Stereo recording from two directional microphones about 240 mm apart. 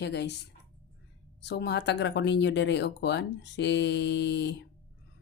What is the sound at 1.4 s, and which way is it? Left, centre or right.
Speech, left.